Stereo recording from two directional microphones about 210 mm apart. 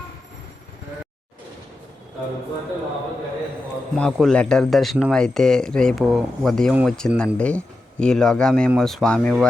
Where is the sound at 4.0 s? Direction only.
5° left (ahead or behind).